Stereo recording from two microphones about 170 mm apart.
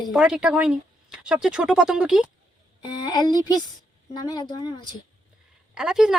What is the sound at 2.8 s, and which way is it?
Speech, 25° left (ahead or behind).